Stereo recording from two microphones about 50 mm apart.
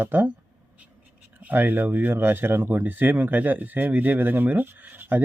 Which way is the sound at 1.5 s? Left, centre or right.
Right.